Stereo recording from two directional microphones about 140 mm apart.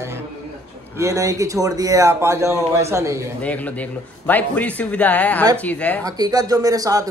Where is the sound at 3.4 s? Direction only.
10° left (ahead or behind).